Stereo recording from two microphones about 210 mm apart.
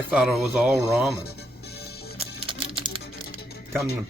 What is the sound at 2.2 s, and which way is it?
Music, 25° right (ahead or behind).